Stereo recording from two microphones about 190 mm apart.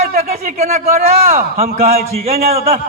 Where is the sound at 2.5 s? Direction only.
30° right (ahead or behind).